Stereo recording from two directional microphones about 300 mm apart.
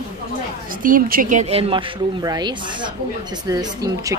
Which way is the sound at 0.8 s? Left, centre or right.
Right.